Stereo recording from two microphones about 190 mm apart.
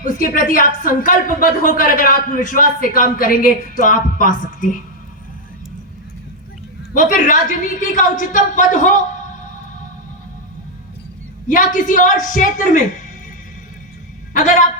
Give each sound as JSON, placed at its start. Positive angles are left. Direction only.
{"t": 0.0, "sound": "a woman's voice", "side_deg": 45}
{"t": 6.9, "sound": "a woman's voice", "side_deg": 45}
{"t": 11.4, "sound": "a woman's voice", "side_deg": 45}
{"t": 14.3, "sound": "a man's voice", "side_deg": 40}